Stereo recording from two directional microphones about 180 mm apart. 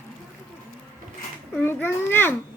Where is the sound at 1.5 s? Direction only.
10° left (ahead or behind).